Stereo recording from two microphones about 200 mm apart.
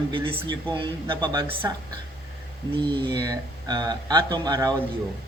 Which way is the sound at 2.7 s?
25° right (ahead or behind).